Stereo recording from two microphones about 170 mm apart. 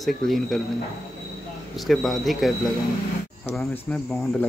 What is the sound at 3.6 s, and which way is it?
Speech, 10° left (ahead or behind).